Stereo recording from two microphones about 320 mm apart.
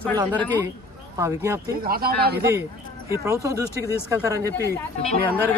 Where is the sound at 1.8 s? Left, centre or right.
Right.